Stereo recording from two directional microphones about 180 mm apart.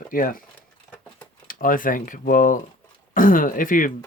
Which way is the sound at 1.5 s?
50° left (ahead or behind).